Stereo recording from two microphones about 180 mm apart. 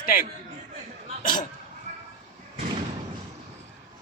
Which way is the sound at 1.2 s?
50° left (ahead or behind).